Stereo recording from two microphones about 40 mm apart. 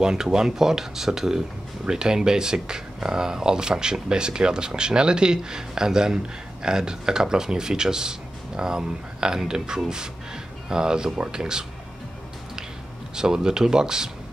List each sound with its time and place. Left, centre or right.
0.0 s speech: centre
13.1 s speech: centre